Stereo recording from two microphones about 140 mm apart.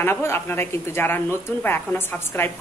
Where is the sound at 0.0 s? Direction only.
15° left (ahead or behind).